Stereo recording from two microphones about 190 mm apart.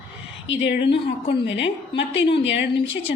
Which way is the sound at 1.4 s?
70° left (ahead or behind).